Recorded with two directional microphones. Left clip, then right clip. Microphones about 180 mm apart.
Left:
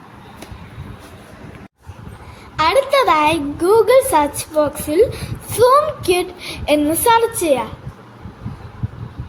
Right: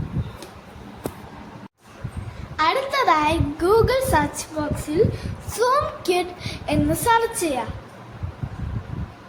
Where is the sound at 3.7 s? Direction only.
15° left (ahead or behind).